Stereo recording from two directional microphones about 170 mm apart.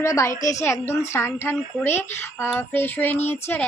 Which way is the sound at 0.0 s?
20° left (ahead or behind).